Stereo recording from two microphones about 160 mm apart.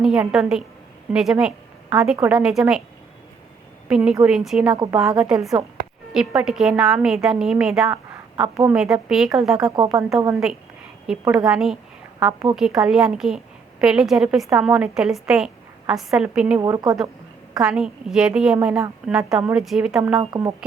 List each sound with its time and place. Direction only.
0.0 s a woman's voice: 5° right (ahead or behind)
3.8 s a woman's voice: 5° right (ahead or behind)
4.7 s a woman's voice: 20° right (ahead or behind)
4.9 s a woman's voice: 5° right (ahead or behind)
8.1 s a sound: 15° right (ahead or behind)
8.8 s a woman's voice: 5° right (ahead or behind)
16.6 s a woman's voice: 25° right (ahead or behind)
17.6 s a woman's voice: 5° right (ahead or behind)